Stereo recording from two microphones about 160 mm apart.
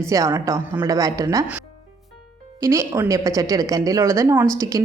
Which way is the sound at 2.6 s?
20° right (ahead or behind).